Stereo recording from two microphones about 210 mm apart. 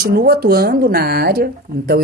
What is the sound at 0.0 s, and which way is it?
Speech, 45° right (ahead or behind).